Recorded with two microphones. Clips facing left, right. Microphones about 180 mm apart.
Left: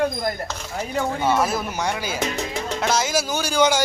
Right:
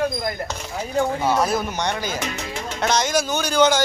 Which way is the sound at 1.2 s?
Centre (ahead or behind).